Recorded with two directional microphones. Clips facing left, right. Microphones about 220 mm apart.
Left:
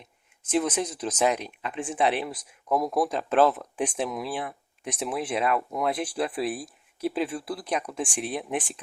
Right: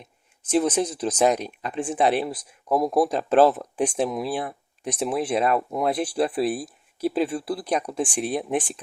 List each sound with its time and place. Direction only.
0.5 s speech: 35° right (ahead or behind)